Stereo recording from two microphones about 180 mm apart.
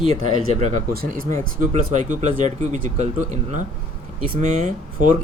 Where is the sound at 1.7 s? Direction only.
40° right (ahead or behind).